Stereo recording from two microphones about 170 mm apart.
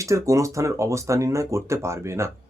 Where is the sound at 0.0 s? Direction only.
20° right (ahead or behind).